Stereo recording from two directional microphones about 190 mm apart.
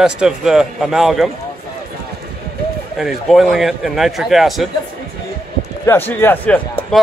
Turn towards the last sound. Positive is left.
turn(degrees=5)  # may be behind; listen again after turning